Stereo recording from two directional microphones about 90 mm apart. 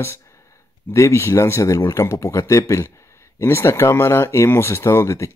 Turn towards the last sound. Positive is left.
turn(degrees=30)  # may be behind; listen again after turning